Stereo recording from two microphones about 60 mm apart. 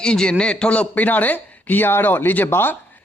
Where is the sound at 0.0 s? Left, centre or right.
Centre; by 2.7 s left.